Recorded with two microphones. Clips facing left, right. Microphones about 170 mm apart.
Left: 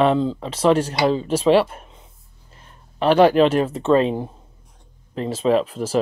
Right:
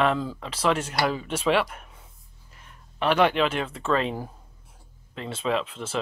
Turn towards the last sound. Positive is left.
turn(degrees=35)  # may be behind; listen again after turning